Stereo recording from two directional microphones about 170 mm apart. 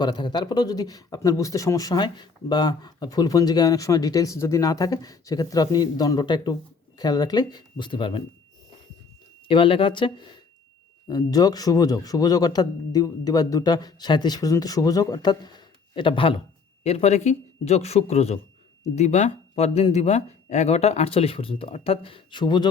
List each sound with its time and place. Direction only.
0.0 s speech: 25° left (ahead or behind)
9.5 s speech: 30° left (ahead or behind)